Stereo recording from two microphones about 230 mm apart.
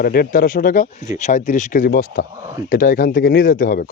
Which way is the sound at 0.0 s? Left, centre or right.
Left.